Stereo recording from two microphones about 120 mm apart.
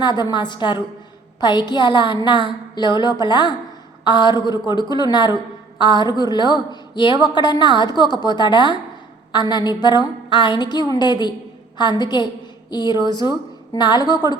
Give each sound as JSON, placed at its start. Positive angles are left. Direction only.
{"t": 0.0, "sound": "a woman's voice", "side_deg": 40}